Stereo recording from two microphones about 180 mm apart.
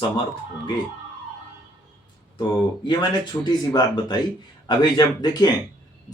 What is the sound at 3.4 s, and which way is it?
Speech, 25° left (ahead or behind).